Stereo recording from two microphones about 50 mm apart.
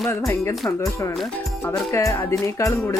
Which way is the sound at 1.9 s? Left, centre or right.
Left.